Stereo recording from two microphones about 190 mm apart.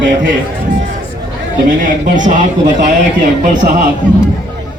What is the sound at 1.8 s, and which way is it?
A man's voice, 45° right (ahead or behind).